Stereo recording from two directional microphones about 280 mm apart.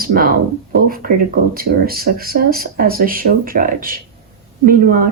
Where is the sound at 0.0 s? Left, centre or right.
Right.